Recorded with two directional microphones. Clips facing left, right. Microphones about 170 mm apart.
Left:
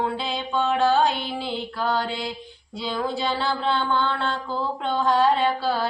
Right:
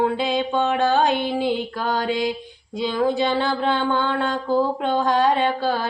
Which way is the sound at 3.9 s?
50° right (ahead or behind).